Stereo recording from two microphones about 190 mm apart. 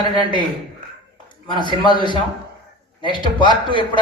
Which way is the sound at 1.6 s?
25° left (ahead or behind).